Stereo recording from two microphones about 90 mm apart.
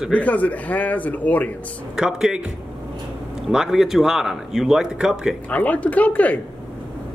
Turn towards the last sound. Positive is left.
turn(degrees=15)  # may be behind; listen again after turning